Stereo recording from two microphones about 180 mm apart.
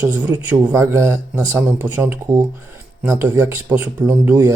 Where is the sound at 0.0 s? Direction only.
10° right (ahead or behind).